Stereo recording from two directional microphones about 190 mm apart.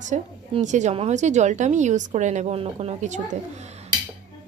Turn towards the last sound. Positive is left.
turn(degrees=-35)  # may be behind; listen again after turning